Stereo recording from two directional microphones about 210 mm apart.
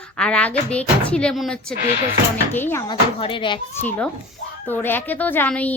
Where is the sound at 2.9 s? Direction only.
25° left (ahead or behind).